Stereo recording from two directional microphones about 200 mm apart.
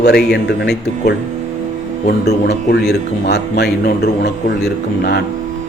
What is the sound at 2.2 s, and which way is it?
A man's voice, 55° left (ahead or behind).